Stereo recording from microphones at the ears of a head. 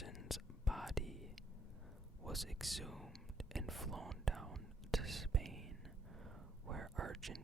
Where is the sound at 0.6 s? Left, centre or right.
Centre.